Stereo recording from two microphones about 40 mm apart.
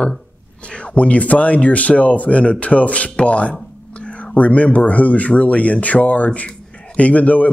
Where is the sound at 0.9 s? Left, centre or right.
Left.